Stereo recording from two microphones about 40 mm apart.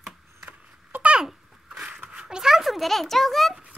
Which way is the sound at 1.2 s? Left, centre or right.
Centre.